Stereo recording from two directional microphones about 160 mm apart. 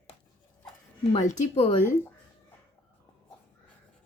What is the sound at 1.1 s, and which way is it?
Speech, 50° left (ahead or behind).